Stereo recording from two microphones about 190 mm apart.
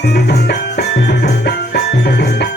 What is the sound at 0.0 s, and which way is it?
Music, 60° left (ahead or behind).